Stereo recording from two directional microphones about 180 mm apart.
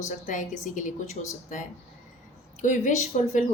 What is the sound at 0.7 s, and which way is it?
Speech, 45° left (ahead or behind).